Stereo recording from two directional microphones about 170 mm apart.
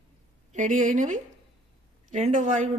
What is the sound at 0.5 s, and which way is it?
Speech, 45° right (ahead or behind).